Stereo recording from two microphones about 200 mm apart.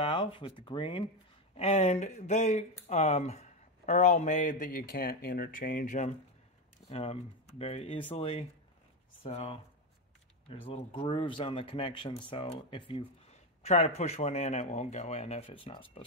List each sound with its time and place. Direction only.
0.0 s speech: 25° left (ahead or behind)